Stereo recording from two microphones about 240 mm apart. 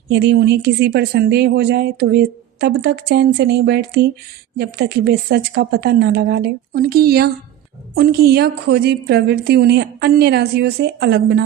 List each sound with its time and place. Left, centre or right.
0.1 s speech: right